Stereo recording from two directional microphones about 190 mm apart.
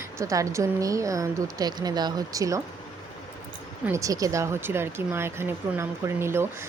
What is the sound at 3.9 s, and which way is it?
Speech, 15° right (ahead or behind).